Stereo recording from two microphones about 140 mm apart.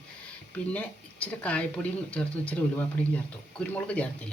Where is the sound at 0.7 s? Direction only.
10° left (ahead or behind).